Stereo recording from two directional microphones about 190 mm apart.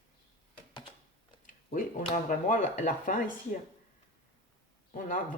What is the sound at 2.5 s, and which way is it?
Speech, 45° left (ahead or behind).